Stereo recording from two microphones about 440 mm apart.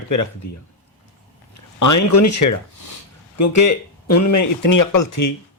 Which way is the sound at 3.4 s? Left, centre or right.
Left.